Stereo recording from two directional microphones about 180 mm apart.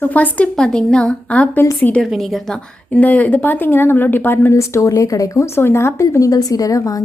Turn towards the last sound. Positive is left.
turn(degrees=20)  # may be behind; listen again after turning